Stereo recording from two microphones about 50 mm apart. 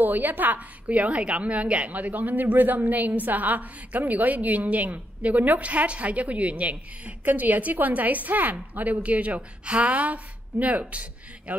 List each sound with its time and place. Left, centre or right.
0.0 s a woman's voice: right